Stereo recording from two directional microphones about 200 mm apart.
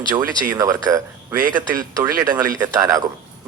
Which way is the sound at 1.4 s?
45° right (ahead or behind).